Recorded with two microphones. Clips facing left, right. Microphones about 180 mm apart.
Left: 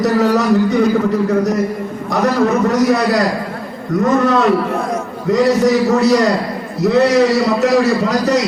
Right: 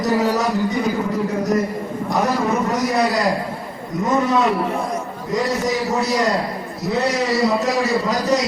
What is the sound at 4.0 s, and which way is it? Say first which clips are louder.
A man's voice: left 4 dB; 70° left (ahead or behind).